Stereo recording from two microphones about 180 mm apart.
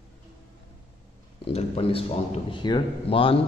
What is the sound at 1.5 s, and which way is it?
A man's voice, 35° left (ahead or behind).